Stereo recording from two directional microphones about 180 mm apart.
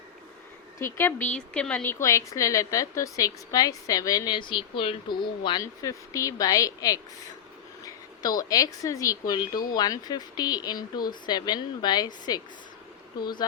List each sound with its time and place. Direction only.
0.9 s a woman's voice: 10° left (ahead or behind)
8.2 s a woman's voice: 20° left (ahead or behind)